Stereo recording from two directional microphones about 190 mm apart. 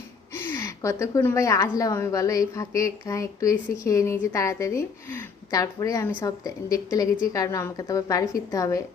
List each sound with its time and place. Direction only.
0.3 s a woman's voice: 15° left (ahead or behind)